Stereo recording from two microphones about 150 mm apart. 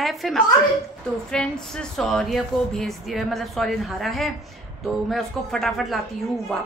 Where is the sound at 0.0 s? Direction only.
Centre (ahead or behind).